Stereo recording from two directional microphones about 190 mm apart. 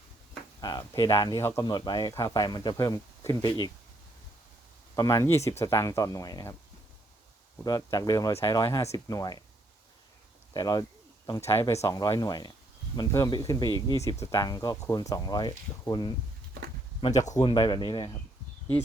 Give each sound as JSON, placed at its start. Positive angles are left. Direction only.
{"t": 0.6, "sound": "speech", "side_deg": 20}
{"t": 4.9, "sound": "speech", "side_deg": 15}
{"t": 7.6, "sound": "speech", "side_deg": 20}
{"t": 10.5, "sound": "speech", "side_deg": 20}
{"t": 17.0, "sound": "speech", "side_deg": 40}
{"t": 17.5, "sound": "speech", "side_deg": 25}